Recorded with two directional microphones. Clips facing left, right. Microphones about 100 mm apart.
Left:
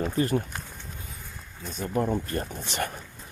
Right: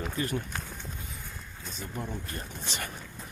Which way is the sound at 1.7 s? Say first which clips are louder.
Left 11 dB; 50° left (ahead or behind).